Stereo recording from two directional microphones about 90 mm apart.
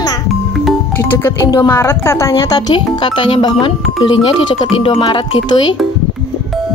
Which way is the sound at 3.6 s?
75° left (ahead or behind).